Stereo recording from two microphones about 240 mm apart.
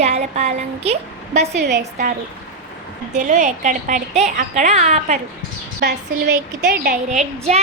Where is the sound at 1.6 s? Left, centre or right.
Right.